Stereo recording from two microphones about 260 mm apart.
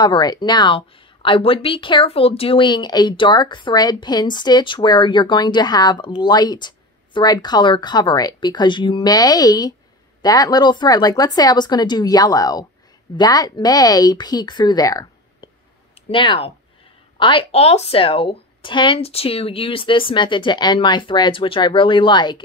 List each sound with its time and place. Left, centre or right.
0.0 s speech: centre